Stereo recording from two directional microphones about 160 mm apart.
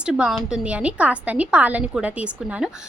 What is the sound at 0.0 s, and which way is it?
A woman's voice, 5° right (ahead or behind).